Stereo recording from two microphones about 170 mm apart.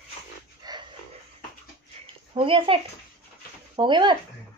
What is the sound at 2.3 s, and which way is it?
A woman's voice, 30° right (ahead or behind).